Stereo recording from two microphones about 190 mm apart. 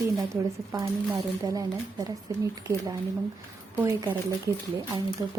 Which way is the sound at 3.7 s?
15° right (ahead or behind).